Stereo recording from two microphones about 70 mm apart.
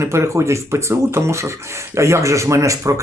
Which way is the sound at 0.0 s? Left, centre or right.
Right.